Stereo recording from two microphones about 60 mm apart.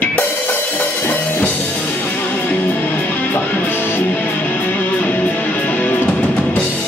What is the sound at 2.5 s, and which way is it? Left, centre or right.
Music, left.